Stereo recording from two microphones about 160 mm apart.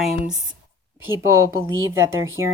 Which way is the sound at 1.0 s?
15° right (ahead or behind).